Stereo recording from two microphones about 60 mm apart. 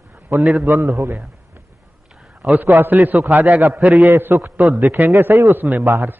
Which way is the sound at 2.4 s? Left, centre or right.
Right.